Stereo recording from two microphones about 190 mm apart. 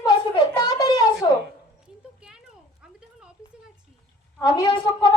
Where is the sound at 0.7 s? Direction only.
20° left (ahead or behind).